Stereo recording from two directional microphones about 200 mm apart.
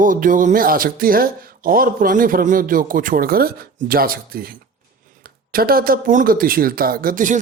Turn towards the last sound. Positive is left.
turn(degrees=-40)  # may be behind; listen again after turning